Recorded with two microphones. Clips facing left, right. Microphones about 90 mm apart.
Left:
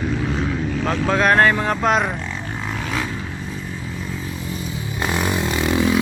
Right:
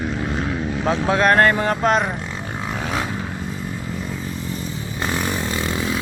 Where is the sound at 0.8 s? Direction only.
10° right (ahead or behind).